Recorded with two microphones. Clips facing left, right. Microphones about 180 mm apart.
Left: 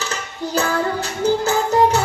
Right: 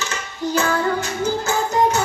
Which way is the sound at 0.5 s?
35° left (ahead or behind).